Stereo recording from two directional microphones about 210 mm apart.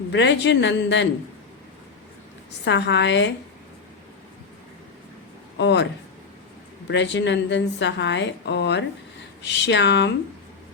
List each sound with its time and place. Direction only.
0.1 s a woman's voice: 55° left (ahead or behind)
2.6 s a woman's voice: 55° left (ahead or behind)
5.5 s a woman's voice: 55° left (ahead or behind)